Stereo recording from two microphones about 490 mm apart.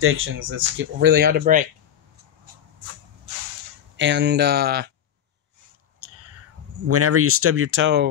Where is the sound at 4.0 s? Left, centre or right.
Right.